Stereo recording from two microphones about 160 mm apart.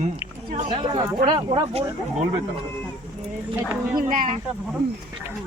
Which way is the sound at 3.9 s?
55° right (ahead or behind).